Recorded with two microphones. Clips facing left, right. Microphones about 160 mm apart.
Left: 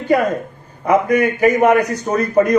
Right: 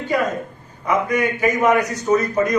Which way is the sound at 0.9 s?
55° left (ahead or behind).